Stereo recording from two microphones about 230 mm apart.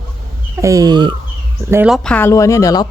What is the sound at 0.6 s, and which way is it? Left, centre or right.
Fowl, centre.